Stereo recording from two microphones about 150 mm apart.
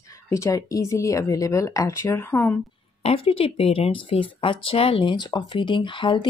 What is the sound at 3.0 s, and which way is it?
Speech, 40° left (ahead or behind).